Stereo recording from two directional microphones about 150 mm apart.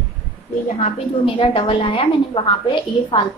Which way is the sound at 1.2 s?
35° left (ahead or behind).